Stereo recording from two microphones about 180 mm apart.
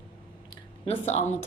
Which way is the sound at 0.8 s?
35° left (ahead or behind).